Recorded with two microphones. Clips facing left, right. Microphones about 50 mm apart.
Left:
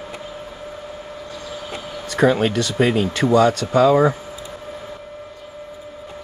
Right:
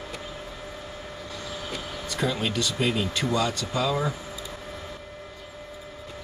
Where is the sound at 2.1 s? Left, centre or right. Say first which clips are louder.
Left 11 dB; left.